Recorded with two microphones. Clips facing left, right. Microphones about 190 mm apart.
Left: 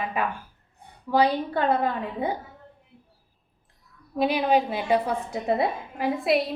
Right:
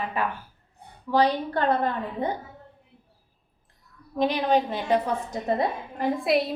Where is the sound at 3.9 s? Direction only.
10° left (ahead or behind).